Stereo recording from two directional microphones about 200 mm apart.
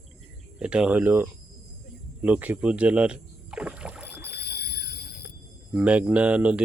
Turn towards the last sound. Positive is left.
turn(degrees=-5)  # may be behind; listen again after turning